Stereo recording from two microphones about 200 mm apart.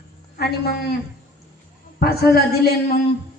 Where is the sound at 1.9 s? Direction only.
50° left (ahead or behind).